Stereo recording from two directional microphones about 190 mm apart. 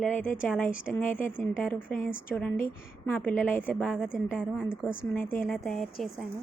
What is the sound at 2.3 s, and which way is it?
A woman's voice, 10° left (ahead or behind).